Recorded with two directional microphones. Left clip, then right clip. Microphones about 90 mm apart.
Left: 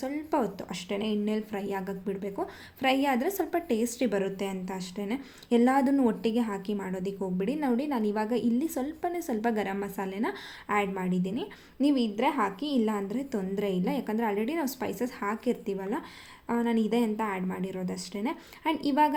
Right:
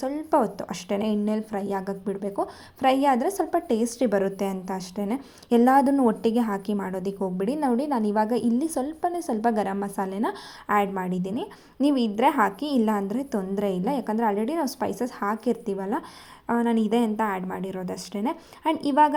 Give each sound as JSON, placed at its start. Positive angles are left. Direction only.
{"t": 0.0, "sound": "a woman's voice", "side_deg": -35}
{"t": 1.2, "sound": "a woman's voice", "side_deg": -35}
{"t": 3.7, "sound": "a woman's voice", "side_deg": -35}
{"t": 6.7, "sound": "a woman's voice", "side_deg": -35}
{"t": 7.0, "sound": "a woman's voice", "side_deg": -45}